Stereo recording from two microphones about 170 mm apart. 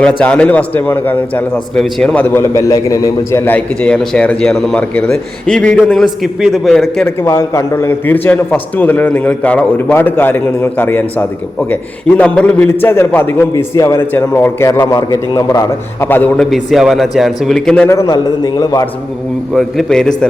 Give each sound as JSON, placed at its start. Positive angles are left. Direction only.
{"t": 0.0, "sound": "a man's voice", "side_deg": 10}
{"t": 7.0, "sound": "a man's voice", "side_deg": 15}
{"t": 17.8, "sound": "a man's voice", "side_deg": 20}
{"t": 19.5, "sound": "a man's voice", "side_deg": 0}